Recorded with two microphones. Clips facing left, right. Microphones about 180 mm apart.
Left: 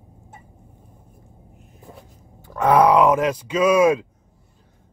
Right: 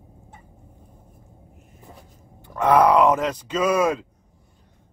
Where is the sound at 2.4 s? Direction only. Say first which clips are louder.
Left 1 dB; 10° left (ahead or behind).